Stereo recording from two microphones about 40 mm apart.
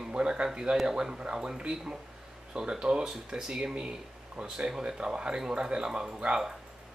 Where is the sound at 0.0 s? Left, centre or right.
Right.